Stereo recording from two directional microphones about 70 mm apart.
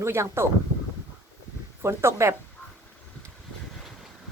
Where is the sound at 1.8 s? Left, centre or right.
Right.